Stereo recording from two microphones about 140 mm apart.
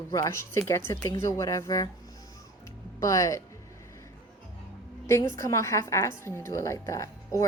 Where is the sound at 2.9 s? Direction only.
20° left (ahead or behind).